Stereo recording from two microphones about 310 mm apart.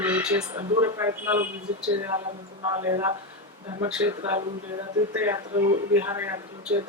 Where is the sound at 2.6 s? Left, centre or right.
Centre.